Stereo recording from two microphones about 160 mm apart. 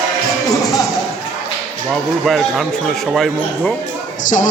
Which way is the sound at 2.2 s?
Centre (ahead or behind).